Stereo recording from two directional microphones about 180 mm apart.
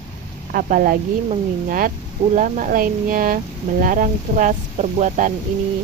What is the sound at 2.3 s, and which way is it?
Speech, 45° right (ahead or behind).